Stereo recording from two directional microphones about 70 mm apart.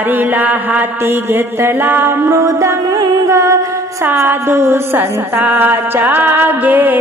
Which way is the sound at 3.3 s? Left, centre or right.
Right.